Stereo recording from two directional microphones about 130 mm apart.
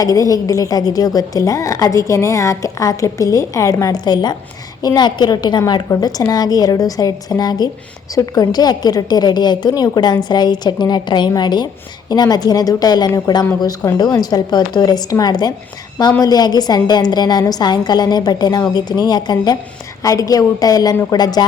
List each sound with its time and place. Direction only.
0.0 s a woman's voice: 30° left (ahead or behind)